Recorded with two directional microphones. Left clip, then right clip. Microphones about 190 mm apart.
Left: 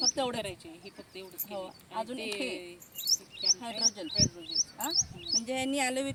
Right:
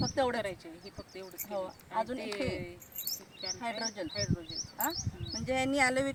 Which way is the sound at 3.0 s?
25° right (ahead or behind).